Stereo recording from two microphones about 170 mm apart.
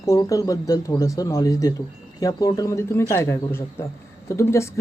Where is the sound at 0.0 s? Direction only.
20° left (ahead or behind).